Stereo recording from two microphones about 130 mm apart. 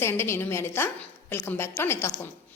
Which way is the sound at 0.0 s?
20° left (ahead or behind).